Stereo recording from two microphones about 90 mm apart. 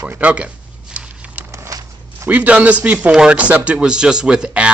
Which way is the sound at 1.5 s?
35° right (ahead or behind).